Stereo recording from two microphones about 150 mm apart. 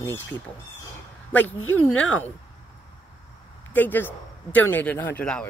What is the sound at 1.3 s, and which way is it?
Speech, 10° left (ahead or behind).